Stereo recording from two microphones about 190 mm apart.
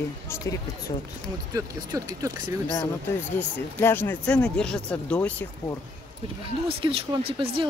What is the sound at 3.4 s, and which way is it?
Speech, 10° left (ahead or behind).